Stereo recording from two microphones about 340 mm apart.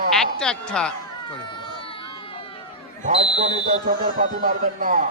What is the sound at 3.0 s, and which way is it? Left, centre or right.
Speech, centre.